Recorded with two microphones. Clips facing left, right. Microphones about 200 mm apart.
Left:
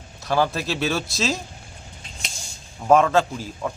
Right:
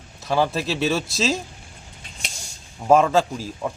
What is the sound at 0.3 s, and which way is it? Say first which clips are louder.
A man's voice: right 1 dB; centre (ahead or behind).